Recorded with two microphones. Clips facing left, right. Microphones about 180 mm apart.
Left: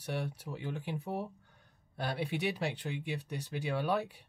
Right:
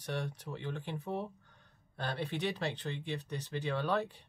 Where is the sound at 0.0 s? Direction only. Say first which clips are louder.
Left 1 dB; 10° left (ahead or behind).